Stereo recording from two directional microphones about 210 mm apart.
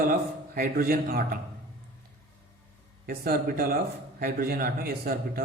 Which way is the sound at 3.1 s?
45° right (ahead or behind).